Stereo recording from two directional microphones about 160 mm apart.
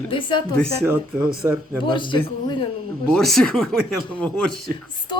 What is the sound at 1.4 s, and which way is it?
Speech, 15° right (ahead or behind).